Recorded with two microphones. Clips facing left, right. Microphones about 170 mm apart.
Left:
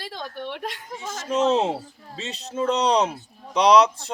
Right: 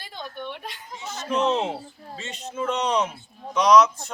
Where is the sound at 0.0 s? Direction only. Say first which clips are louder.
Left 2 dB; 75° left (ahead or behind).